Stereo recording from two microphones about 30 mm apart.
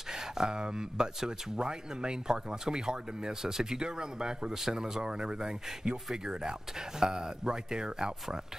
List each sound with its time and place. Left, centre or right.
0.1 s speech: right